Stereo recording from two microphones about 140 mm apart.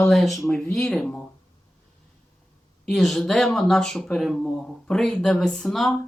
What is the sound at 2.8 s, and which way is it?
Speech, centre (ahead or behind).